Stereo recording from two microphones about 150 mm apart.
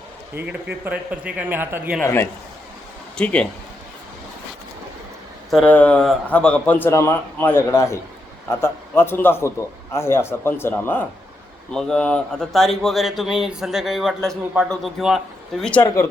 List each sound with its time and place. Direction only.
0.4 s speech: 10° right (ahead or behind)
3.2 s a man's voice: 5° left (ahead or behind)
5.5 s a man's voice: 5° left (ahead or behind)